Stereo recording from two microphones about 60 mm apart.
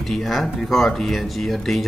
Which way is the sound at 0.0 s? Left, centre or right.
Centre.